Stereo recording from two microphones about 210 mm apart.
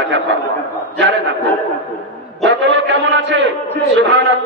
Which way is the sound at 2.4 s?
60° right (ahead or behind).